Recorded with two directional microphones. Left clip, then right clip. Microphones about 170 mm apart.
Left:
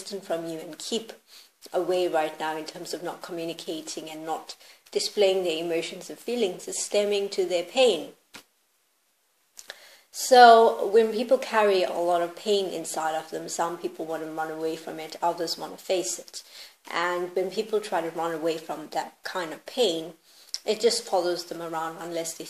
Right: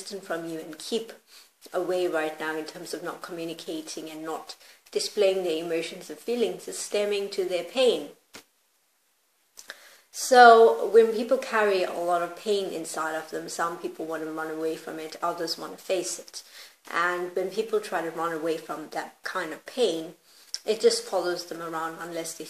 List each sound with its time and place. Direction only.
0.0 s speech: 30° left (ahead or behind)
9.7 s speech: 30° left (ahead or behind)